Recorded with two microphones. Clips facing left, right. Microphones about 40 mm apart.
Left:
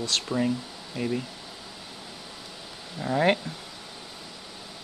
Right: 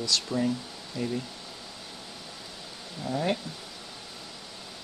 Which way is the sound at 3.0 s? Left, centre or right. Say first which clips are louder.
Left 6 dB; left.